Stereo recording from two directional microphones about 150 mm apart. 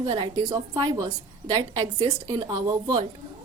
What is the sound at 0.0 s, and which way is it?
A woman's voice, 30° right (ahead or behind).